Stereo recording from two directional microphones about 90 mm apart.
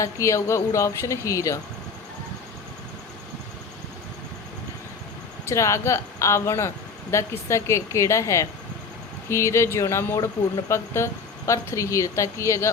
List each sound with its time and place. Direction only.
0.0 s a woman's voice: 35° left (ahead or behind)
5.5 s a woman's voice: 35° left (ahead or behind)